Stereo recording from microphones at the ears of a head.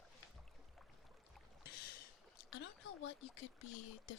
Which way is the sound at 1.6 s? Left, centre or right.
Left.